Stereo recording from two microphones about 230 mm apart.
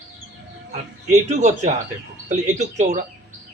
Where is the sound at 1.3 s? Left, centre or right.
Right.